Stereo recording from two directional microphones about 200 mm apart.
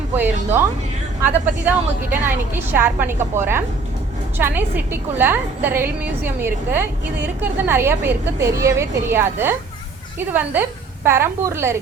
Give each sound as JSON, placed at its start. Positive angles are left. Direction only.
{"t": 1.2, "sound": "a woman's voice", "side_deg": -10}